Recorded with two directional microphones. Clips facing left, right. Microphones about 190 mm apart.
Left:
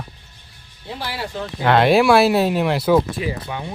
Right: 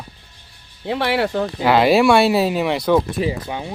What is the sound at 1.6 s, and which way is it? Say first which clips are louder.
Speech: even; centre (ahead or behind).